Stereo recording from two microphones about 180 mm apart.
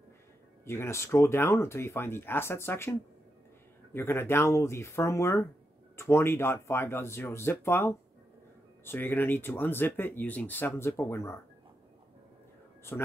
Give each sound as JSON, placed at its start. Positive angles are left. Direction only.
{"t": 0.7, "sound": "speech", "side_deg": 15}